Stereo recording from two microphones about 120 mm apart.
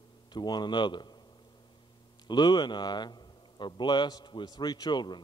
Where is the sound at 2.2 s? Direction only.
40° left (ahead or behind).